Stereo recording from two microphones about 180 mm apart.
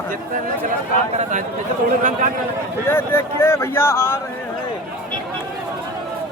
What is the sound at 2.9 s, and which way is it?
A man's voice, 15° left (ahead or behind).